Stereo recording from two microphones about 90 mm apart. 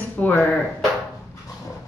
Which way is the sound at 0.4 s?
5° left (ahead or behind).